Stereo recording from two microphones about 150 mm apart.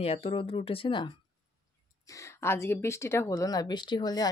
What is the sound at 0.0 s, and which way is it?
Speech, 40° left (ahead or behind).